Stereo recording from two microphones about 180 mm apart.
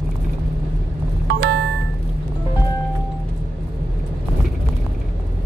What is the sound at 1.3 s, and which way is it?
Music, 70° right (ahead or behind).